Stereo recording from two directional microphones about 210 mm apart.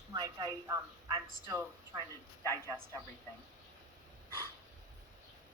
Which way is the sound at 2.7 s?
15° right (ahead or behind).